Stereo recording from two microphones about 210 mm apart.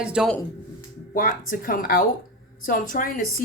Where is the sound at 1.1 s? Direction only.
40° left (ahead or behind).